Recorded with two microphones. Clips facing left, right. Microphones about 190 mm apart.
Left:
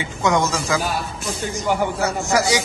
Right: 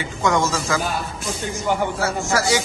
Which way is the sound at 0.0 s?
20° left (ahead or behind).